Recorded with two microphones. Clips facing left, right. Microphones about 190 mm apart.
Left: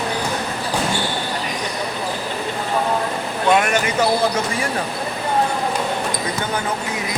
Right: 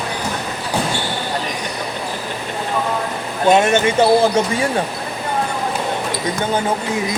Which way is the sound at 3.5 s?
25° right (ahead or behind).